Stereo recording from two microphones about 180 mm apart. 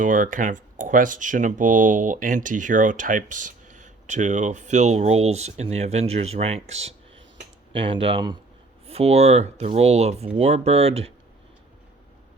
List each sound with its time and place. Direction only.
0.0 s speech: 45° right (ahead or behind)